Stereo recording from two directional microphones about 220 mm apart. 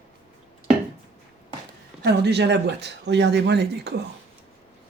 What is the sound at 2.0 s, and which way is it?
Speech, 50° right (ahead or behind).